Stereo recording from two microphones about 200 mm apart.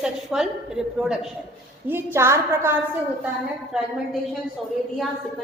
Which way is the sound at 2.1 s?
15° right (ahead or behind).